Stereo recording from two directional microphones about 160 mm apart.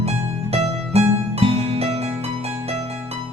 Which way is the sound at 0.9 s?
40° right (ahead or behind).